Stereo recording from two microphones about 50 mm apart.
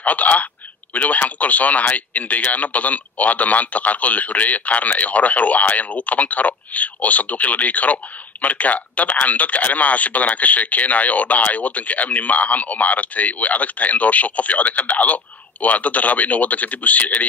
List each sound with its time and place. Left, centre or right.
0.0 s a man's voice: left